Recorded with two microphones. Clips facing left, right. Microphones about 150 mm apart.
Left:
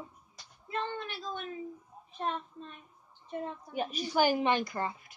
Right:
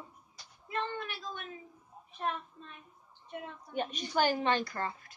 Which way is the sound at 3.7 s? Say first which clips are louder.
Even; 5° left (ahead or behind).